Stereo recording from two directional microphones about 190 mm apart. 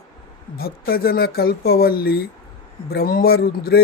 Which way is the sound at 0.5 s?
50° left (ahead or behind).